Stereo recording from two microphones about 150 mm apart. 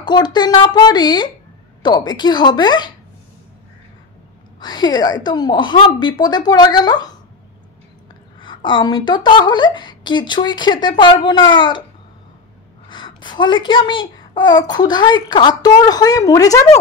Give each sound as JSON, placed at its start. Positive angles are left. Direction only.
{"t": 0.0, "sound": "a child's voice", "side_deg": 30}
{"t": 4.6, "sound": "a child's voice", "side_deg": 25}
{"t": 8.4, "sound": "a woman's voice", "side_deg": 30}
{"t": 12.8, "sound": "a child's voice", "side_deg": 30}